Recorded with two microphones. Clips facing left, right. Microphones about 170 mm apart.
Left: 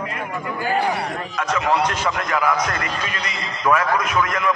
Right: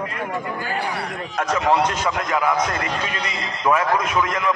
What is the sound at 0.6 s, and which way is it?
Speech, 20° left (ahead or behind).